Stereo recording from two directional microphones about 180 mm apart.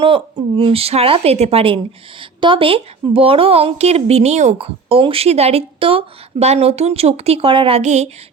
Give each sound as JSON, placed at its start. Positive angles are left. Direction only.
{"t": 0.0, "sound": "a woman's voice", "side_deg": -30}
{"t": 7.8, "sound": "a woman's voice", "side_deg": -40}